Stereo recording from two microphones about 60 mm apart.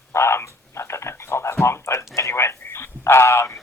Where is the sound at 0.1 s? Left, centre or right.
Left.